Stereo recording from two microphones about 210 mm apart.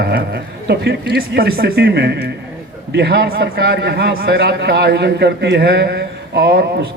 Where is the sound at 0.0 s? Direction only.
50° right (ahead or behind).